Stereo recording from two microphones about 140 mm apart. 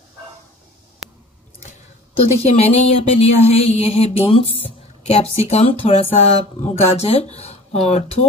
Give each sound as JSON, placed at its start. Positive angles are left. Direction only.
{"t": 2.1, "sound": "a woman's voice", "side_deg": 45}